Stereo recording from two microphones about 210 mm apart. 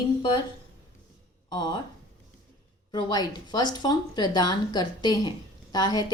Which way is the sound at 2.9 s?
20° left (ahead or behind).